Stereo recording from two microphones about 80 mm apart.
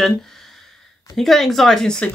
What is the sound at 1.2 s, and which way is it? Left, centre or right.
Speech, centre.